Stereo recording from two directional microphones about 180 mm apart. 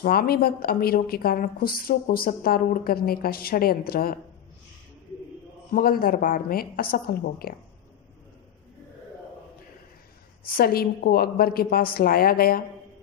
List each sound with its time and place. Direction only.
0.0 s a woman's voice: 55° left (ahead or behind)
5.7 s a woman's voice: 55° left (ahead or behind)
10.4 s a woman's voice: 55° left (ahead or behind)